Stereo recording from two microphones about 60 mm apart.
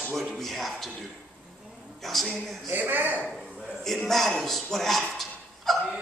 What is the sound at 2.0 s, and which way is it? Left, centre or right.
Speech, centre.